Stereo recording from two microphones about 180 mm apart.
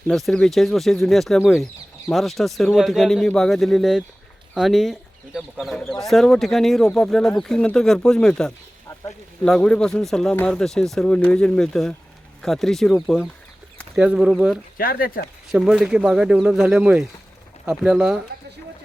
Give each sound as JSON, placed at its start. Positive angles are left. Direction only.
{"t": 0.1, "sound": "speech", "side_deg": 0}
{"t": 14.8, "sound": "speech", "side_deg": 55}
{"t": 15.5, "sound": "speech", "side_deg": -5}